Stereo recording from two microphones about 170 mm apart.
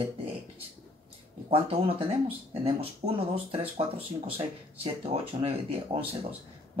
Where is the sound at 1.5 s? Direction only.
35° right (ahead or behind).